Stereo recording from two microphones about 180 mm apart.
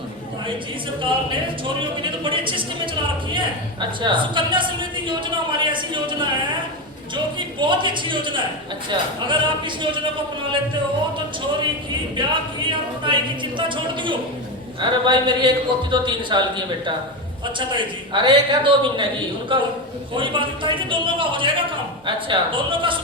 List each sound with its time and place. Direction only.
1.0 s a woman's voice: 30° right (ahead or behind)
7.3 s a woman's voice: 25° right (ahead or behind)
12.1 s a woman's voice: 25° right (ahead or behind)
17.7 s a woman's voice: 25° right (ahead or behind)